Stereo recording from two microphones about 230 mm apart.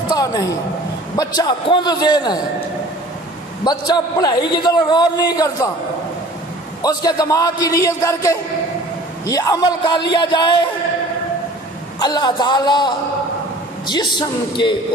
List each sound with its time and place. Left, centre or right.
0.1 s a sound: centre
1.1 s a man's voice: centre
3.6 s a man's voice: centre
6.8 s a man's voice: centre
12.0 s a man's voice: centre